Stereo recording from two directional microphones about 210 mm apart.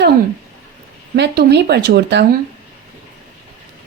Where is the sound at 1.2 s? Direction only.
55° right (ahead or behind).